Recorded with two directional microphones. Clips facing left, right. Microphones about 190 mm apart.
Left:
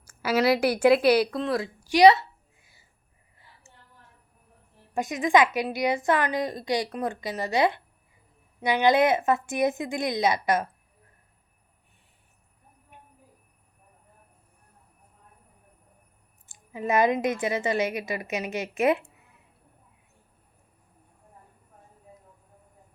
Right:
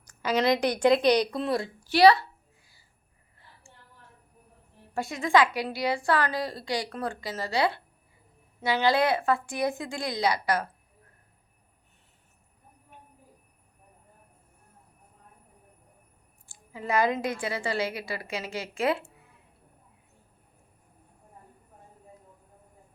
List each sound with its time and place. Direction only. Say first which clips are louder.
0.0 s a woman's voice: left 2 dB; 10° left (ahead or behind)
1.8 s a sound: left 2 dB; 15° left (ahead or behind)
4.9 s a woman's voice: left 2 dB; 20° left (ahead or behind)
16.5 s a woman's voice: left 3 dB; 20° left (ahead or behind)